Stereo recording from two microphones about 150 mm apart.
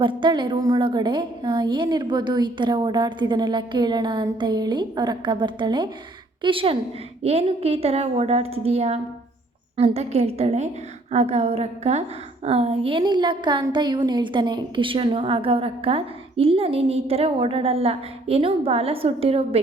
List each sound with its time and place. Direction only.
0.0 s a woman's voice: 30° right (ahead or behind)